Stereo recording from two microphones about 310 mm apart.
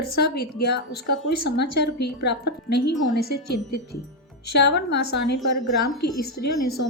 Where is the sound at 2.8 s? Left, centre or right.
Left.